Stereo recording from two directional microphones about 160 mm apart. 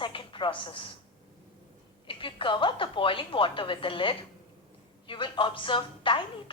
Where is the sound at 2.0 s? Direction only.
30° left (ahead or behind).